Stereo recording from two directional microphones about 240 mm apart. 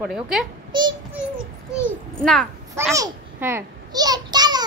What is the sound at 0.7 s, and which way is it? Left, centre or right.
Child singing, centre.